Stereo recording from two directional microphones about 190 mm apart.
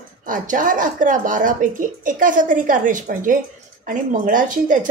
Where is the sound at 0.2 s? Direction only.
45° right (ahead or behind).